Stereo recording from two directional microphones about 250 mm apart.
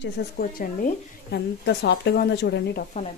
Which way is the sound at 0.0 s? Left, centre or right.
Left.